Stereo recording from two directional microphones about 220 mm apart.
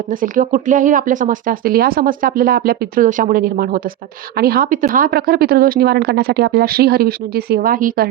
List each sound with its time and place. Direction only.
0.1 s speech: 40° right (ahead or behind)